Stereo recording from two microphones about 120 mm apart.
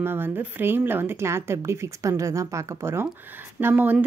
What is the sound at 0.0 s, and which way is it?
Speech, 20° right (ahead or behind).